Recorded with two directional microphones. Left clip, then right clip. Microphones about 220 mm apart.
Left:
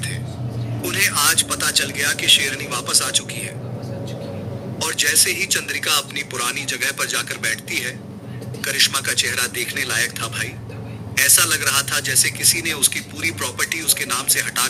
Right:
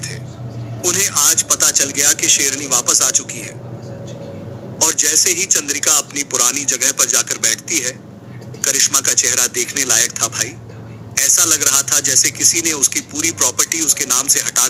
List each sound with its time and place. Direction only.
0.9 s a man's voice: 5° left (ahead or behind)
4.8 s a man's voice: centre (ahead or behind)